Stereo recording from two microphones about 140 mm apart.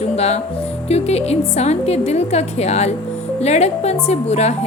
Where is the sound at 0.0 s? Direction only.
50° left (ahead or behind).